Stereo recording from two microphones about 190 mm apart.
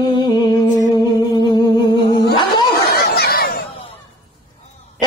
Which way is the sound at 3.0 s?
55° left (ahead or behind).